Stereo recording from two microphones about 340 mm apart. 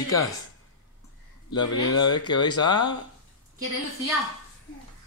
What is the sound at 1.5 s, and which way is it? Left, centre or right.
Speech, centre.